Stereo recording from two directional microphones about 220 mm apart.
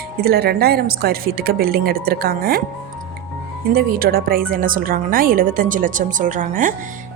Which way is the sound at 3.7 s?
40° right (ahead or behind).